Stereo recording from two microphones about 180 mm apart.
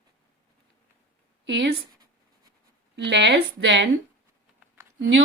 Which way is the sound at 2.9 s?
80° right.